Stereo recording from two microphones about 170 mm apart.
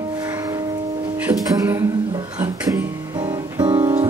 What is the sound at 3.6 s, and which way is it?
Music, 25° right (ahead or behind).